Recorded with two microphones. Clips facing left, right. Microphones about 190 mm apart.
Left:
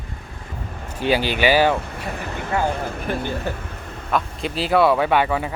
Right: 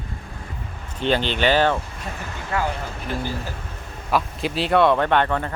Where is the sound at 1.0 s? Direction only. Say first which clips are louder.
Left 1 dB; 10° left (ahead or behind).